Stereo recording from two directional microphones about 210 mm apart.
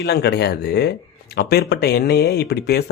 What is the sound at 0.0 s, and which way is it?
Speech, 50° left (ahead or behind).